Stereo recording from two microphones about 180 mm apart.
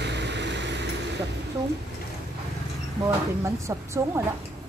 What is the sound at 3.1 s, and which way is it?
Speech, 15° right (ahead or behind).